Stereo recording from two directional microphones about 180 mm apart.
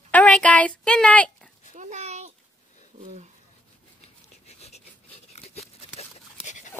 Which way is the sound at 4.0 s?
35° left (ahead or behind).